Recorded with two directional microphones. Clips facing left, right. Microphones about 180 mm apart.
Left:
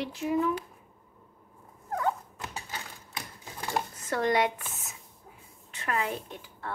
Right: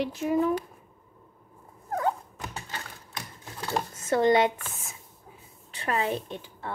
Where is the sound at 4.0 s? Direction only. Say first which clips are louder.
Right 6 dB; 25° right (ahead or behind).